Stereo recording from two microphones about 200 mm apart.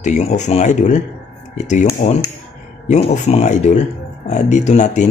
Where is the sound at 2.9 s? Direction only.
35° left (ahead or behind).